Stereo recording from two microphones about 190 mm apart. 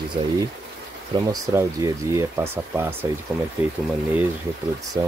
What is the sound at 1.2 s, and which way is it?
Speech, 20° right (ahead or behind).